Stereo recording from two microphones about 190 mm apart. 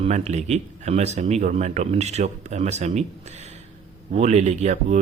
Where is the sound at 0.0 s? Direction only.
35° right (ahead or behind).